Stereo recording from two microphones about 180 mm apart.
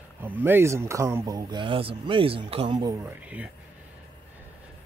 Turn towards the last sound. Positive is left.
turn(degrees=-10)  # may be behind; listen again after turning